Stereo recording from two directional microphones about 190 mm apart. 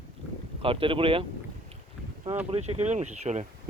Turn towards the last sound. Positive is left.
turn(degrees=-35)  # may be behind; listen again after turning